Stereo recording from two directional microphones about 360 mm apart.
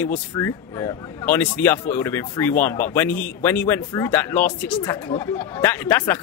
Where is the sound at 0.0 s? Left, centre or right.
Centre.